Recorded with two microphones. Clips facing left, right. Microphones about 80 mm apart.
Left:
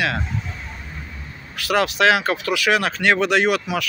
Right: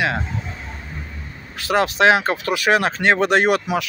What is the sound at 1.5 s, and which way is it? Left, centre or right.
Speech, right.